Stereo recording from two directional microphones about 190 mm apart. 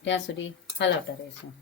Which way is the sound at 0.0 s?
70° left (ahead or behind).